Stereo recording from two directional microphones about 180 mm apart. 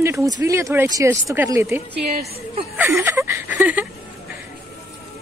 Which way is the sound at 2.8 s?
15° right (ahead or behind).